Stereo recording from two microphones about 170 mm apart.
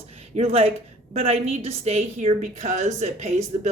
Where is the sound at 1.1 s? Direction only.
35° right (ahead or behind).